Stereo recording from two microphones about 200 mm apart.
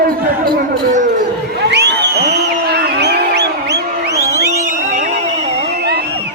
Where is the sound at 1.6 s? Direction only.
60° right (ahead or behind).